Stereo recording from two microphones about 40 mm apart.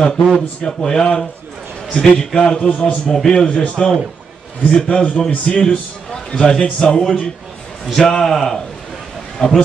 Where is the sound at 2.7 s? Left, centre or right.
Left.